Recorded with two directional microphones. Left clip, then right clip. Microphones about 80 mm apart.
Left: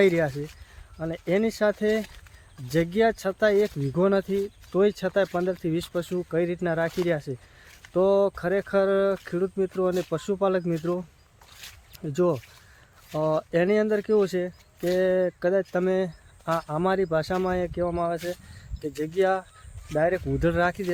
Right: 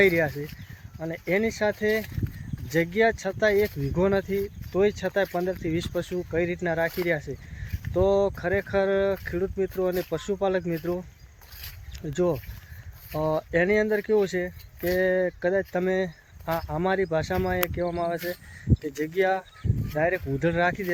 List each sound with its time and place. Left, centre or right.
0.0 s speech: left
4.7 s speech: left
6.3 s speech: left
10.1 s speech: left
12.0 s speech: left
16.6 s speech: left
17.5 s speech: left
18.8 s speech: left